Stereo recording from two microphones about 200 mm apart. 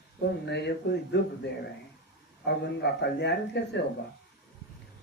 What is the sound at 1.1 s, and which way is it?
Speech, 60° left (ahead or behind).